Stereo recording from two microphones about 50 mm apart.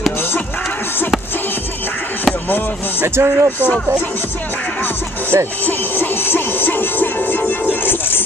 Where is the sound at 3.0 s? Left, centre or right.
Right.